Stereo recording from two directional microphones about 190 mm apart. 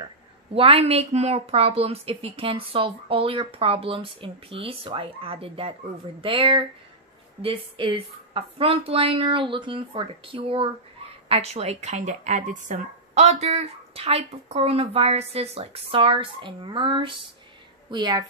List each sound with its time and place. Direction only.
0.6 s a woman's voice: 30° right (ahead or behind)